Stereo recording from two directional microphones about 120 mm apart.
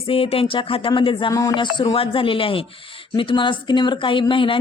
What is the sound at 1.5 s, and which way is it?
Music, 40° left (ahead or behind).